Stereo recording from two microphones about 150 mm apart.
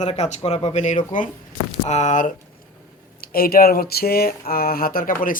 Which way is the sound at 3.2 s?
85° left.